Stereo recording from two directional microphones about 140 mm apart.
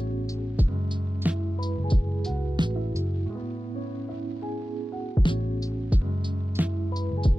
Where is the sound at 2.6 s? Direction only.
30° right (ahead or behind).